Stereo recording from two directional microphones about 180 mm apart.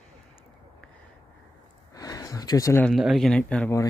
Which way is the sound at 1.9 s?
20° left (ahead or behind).